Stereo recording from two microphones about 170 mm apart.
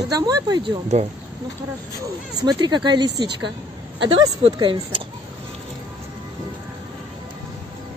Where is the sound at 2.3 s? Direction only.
25° right (ahead or behind).